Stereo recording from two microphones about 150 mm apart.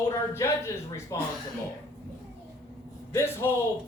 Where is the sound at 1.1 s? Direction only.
25° left (ahead or behind).